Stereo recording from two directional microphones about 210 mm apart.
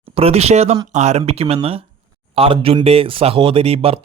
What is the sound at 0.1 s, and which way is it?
Speech, 30° right (ahead or behind).